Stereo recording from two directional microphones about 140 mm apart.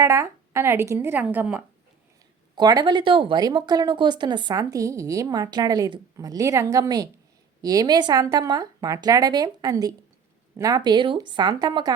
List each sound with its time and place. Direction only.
0.0 s a woman's voice: 20° right (ahead or behind)
2.6 s a woman's voice: 30° right (ahead or behind)